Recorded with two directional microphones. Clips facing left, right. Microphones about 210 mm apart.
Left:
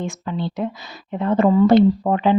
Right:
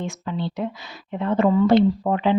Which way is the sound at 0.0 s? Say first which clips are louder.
Left 2 dB; 45° left (ahead or behind).